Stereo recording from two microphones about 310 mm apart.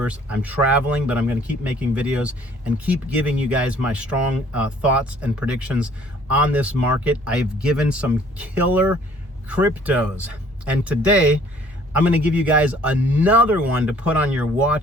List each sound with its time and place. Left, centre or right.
0.0 s speech: centre